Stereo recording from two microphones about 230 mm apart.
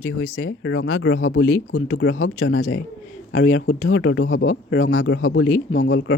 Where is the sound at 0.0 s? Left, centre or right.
Left.